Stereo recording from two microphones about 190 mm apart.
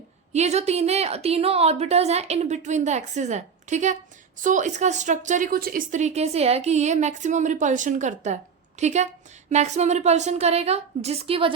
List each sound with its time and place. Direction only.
0.3 s a woman's voice: 35° right (ahead or behind)